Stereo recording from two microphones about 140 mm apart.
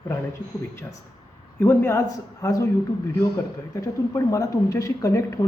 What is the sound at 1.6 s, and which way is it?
A woman's voice, 15° left (ahead or behind).